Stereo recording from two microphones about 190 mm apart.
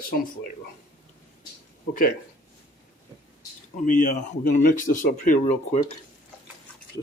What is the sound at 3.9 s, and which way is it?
Speech, 40° left (ahead or behind).